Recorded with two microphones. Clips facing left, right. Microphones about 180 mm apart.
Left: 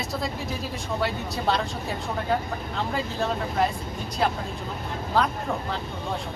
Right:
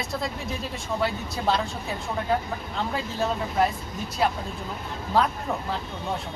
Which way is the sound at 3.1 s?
Centre (ahead or behind).